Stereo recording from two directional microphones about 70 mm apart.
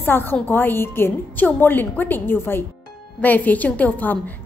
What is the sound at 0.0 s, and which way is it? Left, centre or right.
A woman's voice, left.